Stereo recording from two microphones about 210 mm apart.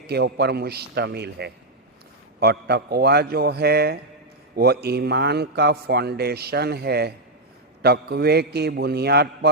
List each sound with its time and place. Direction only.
0.1 s a man's voice: 50° right (ahead or behind)